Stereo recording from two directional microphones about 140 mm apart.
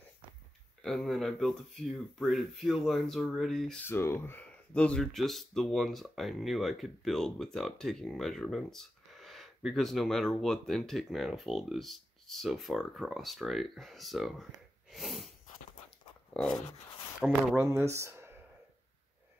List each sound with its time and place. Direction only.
0.8 s speech: centre (ahead or behind)
3.8 s speech: 15° left (ahead or behind); by 14.3 s centre (ahead or behind)
14.9 s sneeze: centre (ahead or behind)
17.3 s speech: 15° right (ahead or behind)